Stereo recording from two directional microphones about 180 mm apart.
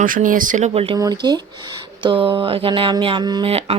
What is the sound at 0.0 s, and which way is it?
Speech, 45° right (ahead or behind).